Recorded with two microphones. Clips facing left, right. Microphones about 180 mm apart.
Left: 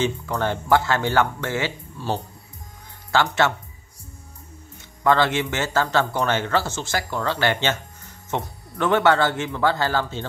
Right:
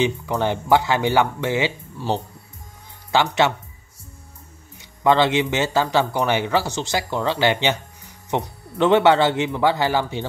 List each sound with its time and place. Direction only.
0.0 s speech: 15° right (ahead or behind)
4.7 s speech: 20° right (ahead or behind)